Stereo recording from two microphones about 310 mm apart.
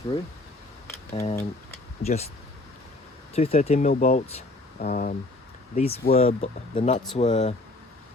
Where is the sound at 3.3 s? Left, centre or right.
Centre.